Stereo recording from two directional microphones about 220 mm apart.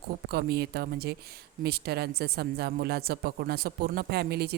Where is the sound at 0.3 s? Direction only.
45° right (ahead or behind).